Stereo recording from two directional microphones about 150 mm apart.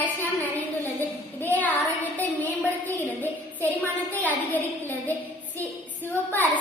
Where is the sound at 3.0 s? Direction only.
10° left (ahead or behind).